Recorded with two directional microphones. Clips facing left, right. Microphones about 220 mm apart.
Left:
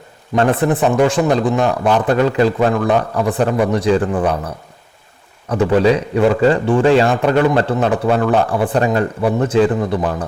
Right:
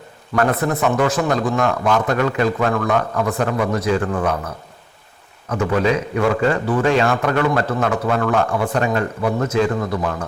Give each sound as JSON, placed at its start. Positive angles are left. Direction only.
{"t": 0.3, "sound": "a man's voice", "side_deg": 30}
{"t": 5.5, "sound": "a man's voice", "side_deg": 30}